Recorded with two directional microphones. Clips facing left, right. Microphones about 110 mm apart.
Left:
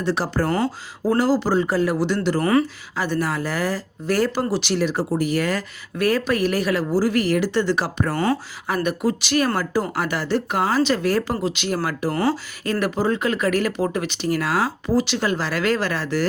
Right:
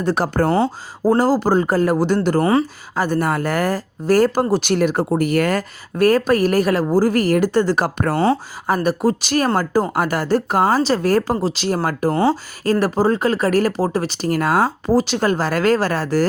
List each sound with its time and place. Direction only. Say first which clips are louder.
0.0 s speech: right 4 dB; 50° right (ahead or behind)
0.4 s speech: right 4 dB; 30° right (ahead or behind); by 2.4 s 45° right (ahead or behind)
2.4 s speech: even; 25° right (ahead or behind)
2.9 s speech: right 5 dB; 45° right (ahead or behind)
8.1 s speech: right 6 dB; 30° right (ahead or behind); by 12.1 s 45° right (ahead or behind)
12.1 s speech: right 4 dB; 20° right (ahead or behind)
12.6 s speech: right 5 dB; 35° right (ahead or behind)